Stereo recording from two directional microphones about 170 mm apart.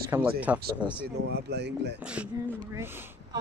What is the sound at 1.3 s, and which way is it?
Speech, 70° right (ahead or behind).